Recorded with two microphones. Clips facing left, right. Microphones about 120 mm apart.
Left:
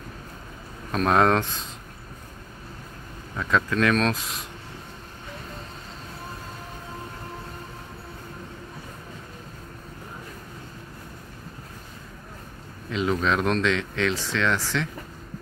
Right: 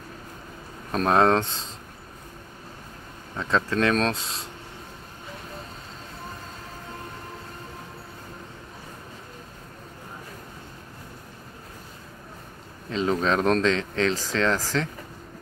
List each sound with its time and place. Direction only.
0.9 s speech: 25° right (ahead or behind)
3.3 s speech: 30° right (ahead or behind)
12.9 s speech: 35° right (ahead or behind)